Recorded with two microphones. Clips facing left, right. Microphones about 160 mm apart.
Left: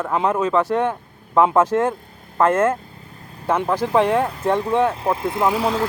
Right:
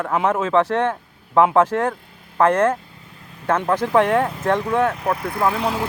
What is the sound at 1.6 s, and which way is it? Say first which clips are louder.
Speech: even; 15° left (ahead or behind).